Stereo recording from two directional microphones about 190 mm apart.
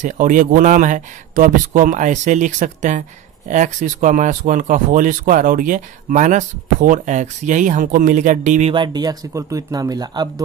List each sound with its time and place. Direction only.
0.0 s speech: 45° right (ahead or behind)
8.7 s speech: 20° right (ahead or behind)